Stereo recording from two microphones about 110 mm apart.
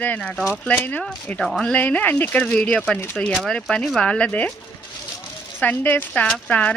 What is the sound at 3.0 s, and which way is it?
Speech, 20° left (ahead or behind).